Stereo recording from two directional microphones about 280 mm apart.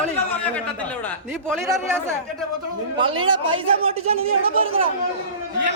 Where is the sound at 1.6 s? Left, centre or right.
Centre.